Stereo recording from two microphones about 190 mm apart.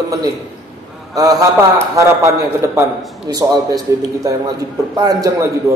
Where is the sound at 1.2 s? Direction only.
20° right (ahead or behind).